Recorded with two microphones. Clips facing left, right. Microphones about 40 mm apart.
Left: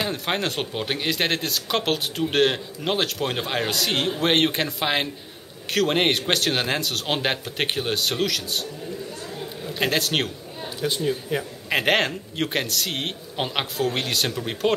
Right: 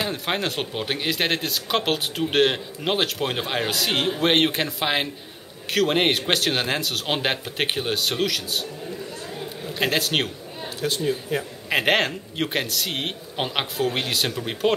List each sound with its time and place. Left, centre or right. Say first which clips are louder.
0.0 s speech: even; centre
9.4 s a sound: even; centre
10.9 s speech: even; centre